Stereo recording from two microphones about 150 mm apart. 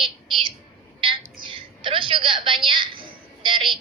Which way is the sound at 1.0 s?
35° right (ahead or behind).